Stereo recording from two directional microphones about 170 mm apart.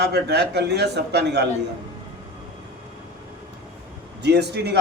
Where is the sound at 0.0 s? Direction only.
80° right.